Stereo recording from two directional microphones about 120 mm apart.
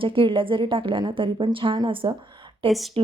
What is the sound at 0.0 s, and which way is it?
A woman's voice, 45° right (ahead or behind).